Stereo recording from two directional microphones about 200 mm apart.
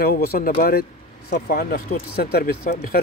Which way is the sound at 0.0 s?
50° left (ahead or behind).